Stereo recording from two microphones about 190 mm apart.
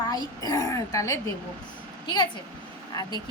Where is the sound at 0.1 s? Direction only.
20° left (ahead or behind).